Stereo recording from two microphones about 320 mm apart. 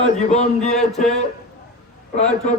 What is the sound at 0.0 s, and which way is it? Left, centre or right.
A man's voice, left.